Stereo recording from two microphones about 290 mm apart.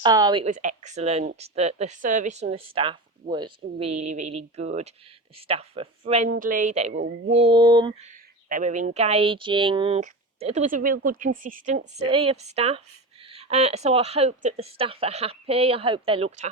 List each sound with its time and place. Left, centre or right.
0.0 s speech: centre
7.0 s a sound: right
8.4 s speech: right